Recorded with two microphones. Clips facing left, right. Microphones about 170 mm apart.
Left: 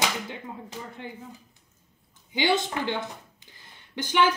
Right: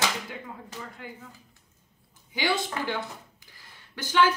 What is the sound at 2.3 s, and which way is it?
Speech, 20° left (ahead or behind).